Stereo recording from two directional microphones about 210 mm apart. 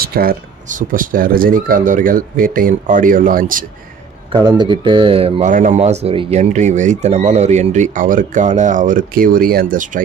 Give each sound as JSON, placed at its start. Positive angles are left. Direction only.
{"t": 0.0, "sound": "speech", "side_deg": -45}
{"t": 4.3, "sound": "speech", "side_deg": -20}